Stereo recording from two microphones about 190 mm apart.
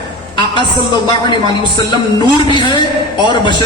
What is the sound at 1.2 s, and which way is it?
A man's voice, 20° left (ahead or behind).